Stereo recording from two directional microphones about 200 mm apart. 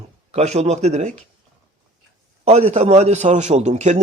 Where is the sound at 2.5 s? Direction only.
30° right (ahead or behind).